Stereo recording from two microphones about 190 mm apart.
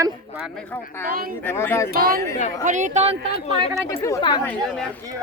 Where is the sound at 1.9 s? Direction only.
50° right (ahead or behind).